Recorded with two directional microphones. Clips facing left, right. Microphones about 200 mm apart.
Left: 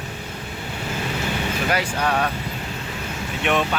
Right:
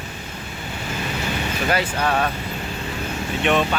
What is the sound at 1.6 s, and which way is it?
Speech, 10° left (ahead or behind).